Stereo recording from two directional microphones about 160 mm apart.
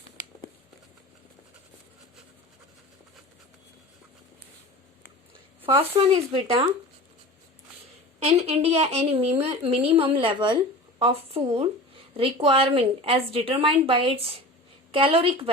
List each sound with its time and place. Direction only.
5.6 s a woman's voice: 35° right (ahead or behind)
8.2 s a woman's voice: 40° right (ahead or behind)